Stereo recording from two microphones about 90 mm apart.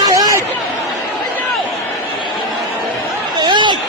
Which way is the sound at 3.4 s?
60° right (ahead or behind).